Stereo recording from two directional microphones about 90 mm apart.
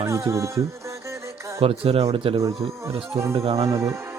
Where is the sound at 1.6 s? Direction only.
90° right.